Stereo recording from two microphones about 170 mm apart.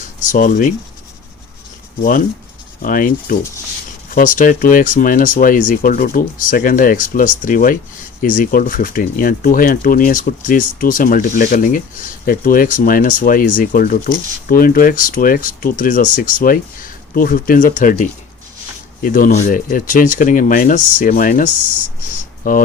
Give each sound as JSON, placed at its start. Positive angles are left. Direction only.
{"t": 0.2, "sound": "speech", "side_deg": 50}
{"t": 2.0, "sound": "speech", "side_deg": 55}